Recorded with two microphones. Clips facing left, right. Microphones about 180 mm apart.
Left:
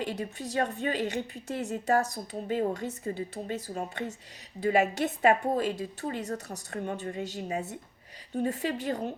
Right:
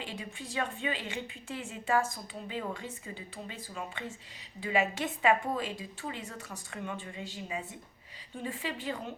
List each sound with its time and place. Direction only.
0.0 s a woman's voice: 40° left (ahead or behind)